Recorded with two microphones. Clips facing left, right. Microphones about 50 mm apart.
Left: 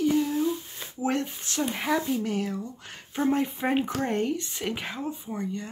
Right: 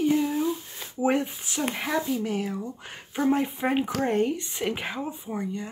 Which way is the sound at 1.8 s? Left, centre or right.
Centre.